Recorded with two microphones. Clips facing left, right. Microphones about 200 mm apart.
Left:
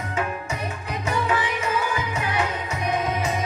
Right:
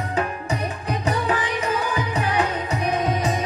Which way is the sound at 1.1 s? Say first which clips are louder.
Even; 35° right (ahead or behind).